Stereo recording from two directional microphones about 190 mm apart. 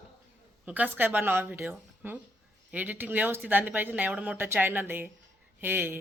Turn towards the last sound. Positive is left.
turn(degrees=-10)  # may be behind; listen again after turning